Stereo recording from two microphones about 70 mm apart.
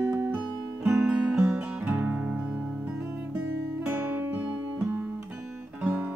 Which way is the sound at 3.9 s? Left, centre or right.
Right.